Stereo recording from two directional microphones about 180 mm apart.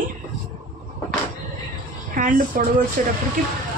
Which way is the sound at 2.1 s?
50° right (ahead or behind).